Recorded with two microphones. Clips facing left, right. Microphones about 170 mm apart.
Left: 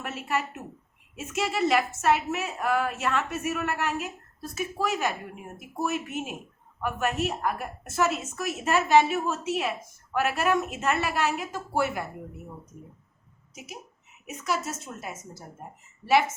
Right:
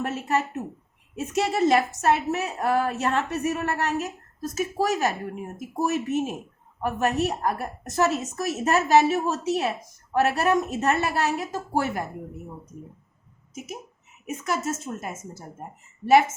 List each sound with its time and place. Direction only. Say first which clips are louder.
0.0 s a woman's voice: right 5 dB; 35° right (ahead or behind)
14.3 s a woman's voice: right 3 dB; 50° right (ahead or behind)